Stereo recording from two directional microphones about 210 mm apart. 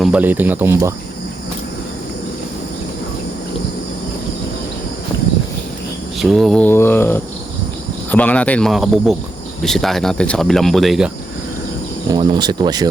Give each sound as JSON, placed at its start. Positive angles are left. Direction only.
{"t": 0.0, "sound": "speech", "side_deg": -5}
{"t": 6.1, "sound": "speech", "side_deg": 0}
{"t": 12.1, "sound": "speech", "side_deg": -20}